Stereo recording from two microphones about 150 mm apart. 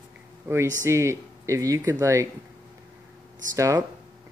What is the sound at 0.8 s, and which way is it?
Speech, 20° right (ahead or behind).